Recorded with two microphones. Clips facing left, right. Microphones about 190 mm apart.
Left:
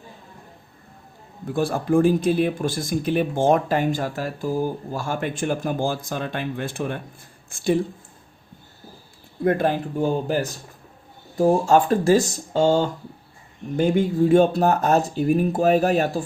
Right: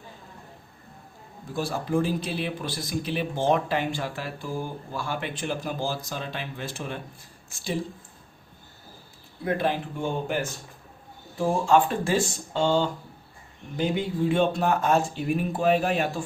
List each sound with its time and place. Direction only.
1.5 s speech: 55° left (ahead or behind)
9.4 s speech: 50° left (ahead or behind)